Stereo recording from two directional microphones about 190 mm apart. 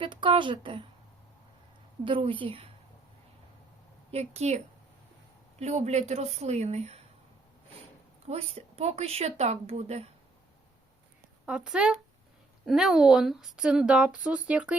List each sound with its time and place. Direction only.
0.0 s speech: 25° right (ahead or behind)
2.0 s speech: 25° right (ahead or behind)
4.1 s speech: 35° right (ahead or behind)
8.3 s speech: 30° right (ahead or behind)
11.4 s a woman's voice: 5° right (ahead or behind)